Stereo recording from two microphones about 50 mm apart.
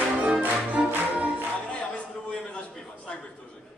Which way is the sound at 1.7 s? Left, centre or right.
Left.